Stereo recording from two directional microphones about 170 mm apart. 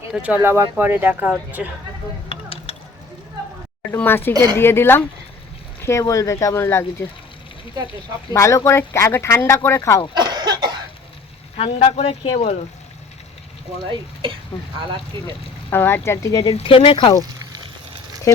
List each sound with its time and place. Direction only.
0.1 s speech: 10° right (ahead or behind)
2.3 s mechanisms: 35° left (ahead or behind)
3.9 s speech: 10° left (ahead or behind)
8.3 s speech: 20° left (ahead or behind)
10.2 s cough: 25° right (ahead or behind)
11.5 s speech: 35° left (ahead or behind)
15.7 s speech: 15° left (ahead or behind)
16.6 s speech: 35° left (ahead or behind)